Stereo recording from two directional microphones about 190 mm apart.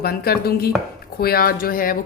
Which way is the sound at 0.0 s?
55° left (ahead or behind).